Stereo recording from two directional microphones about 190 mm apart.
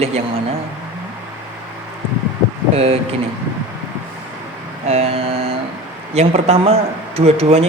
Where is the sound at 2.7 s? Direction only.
35° right (ahead or behind).